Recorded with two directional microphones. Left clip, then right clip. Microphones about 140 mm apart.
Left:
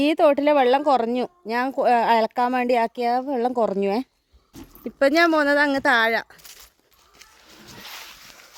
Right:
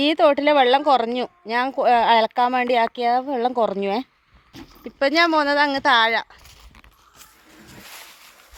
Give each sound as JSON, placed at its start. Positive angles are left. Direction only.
{"t": 0.0, "sound": "speech", "side_deg": 25}
{"t": 4.9, "sound": "speech", "side_deg": 50}